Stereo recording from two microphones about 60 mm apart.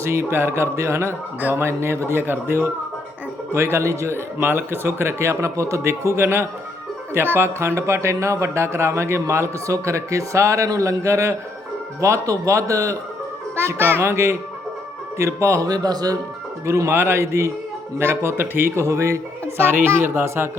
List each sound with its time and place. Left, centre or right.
0.0 s speech: right
3.5 s speech: right
4.4 s speech: right
13.6 s speech: right
15.6 s speech: right
16.6 s speech: right
18.9 s speech: right
19.5 s speech: right